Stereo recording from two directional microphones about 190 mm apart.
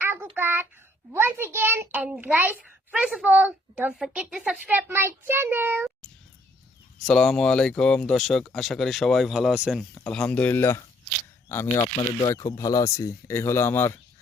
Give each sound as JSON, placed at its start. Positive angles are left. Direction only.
{"t": 0.0, "sound": "child singing", "side_deg": -10}
{"t": 0.3, "sound": "a woman's voice", "side_deg": -10}
{"t": 7.0, "sound": "speech", "side_deg": 5}
{"t": 9.9, "sound": "speech", "side_deg": 5}
{"t": 11.7, "sound": "speech", "side_deg": 25}